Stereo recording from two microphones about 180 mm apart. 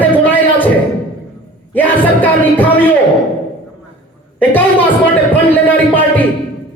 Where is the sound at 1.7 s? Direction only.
10° left (ahead or behind).